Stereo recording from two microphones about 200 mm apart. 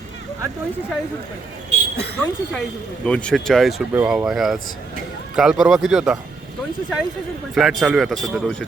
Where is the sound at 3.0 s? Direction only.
5° left (ahead or behind).